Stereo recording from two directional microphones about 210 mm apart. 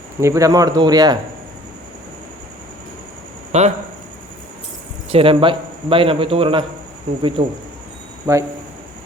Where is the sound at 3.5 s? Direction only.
30° right (ahead or behind).